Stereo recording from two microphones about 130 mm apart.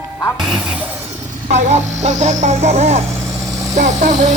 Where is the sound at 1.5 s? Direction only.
60° right (ahead or behind).